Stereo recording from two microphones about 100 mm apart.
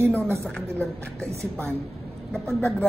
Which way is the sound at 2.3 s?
10° left (ahead or behind).